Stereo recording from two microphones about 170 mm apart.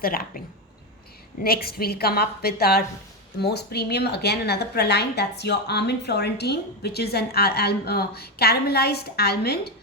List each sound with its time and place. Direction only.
0.0 s a woman's voice: 60° left (ahead or behind)
1.5 s a woman's voice: 65° left (ahead or behind)